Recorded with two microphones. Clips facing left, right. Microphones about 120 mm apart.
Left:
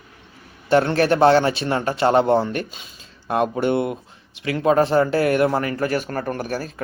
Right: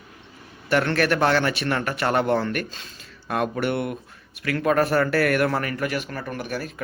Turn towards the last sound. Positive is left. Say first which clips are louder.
# left 4 dB
turn(degrees=40)  # may be behind; listen again after turning